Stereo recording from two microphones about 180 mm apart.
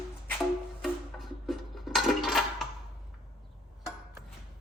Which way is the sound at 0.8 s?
Centre (ahead or behind).